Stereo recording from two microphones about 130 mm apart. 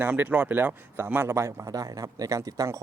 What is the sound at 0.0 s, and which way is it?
Speech, 15° right (ahead or behind).